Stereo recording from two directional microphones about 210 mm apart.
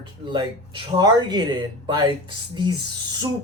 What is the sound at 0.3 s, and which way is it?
Speech, 20° right (ahead or behind).